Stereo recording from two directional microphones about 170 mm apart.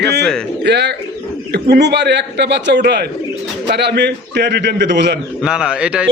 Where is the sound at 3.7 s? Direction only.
80° right.